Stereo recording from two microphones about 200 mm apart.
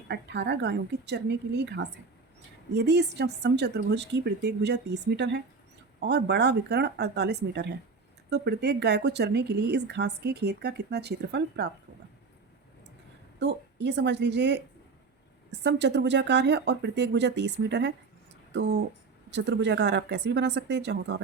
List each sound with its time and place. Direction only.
0.1 s speech: 60° right (ahead or behind)
13.4 s speech: 60° right (ahead or behind)